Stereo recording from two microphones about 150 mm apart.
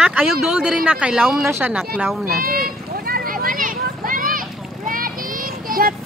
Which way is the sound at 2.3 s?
75° right (ahead or behind).